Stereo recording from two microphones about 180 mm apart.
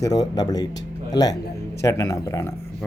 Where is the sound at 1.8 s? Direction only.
15° left (ahead or behind).